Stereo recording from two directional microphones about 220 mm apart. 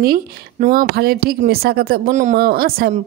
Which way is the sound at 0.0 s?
40° right (ahead or behind).